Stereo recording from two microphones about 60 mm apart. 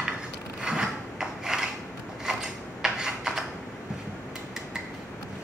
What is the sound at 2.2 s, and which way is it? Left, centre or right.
Mechanisms, centre.